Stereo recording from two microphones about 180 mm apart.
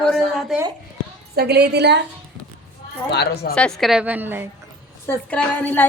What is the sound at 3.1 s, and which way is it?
Speech, 65° left (ahead or behind).